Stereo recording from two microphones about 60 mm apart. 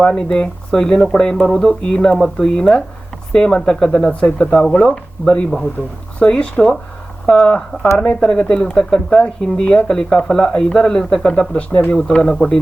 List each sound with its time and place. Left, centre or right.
0.0 s speech: centre
4.1 s speech: left